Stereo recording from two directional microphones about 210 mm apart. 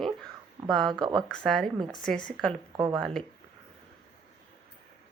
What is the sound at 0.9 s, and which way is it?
Speech, 20° right (ahead or behind).